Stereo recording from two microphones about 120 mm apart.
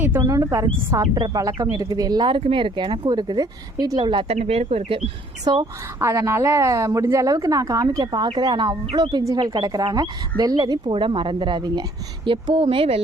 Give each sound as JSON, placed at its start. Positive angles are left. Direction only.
{"t": 0.2, "sound": "a woman's voice", "side_deg": -30}
{"t": 4.3, "sound": "speech", "side_deg": -60}
{"t": 5.5, "sound": "speech", "side_deg": -40}
{"t": 6.0, "sound": "a woman's voice", "side_deg": -25}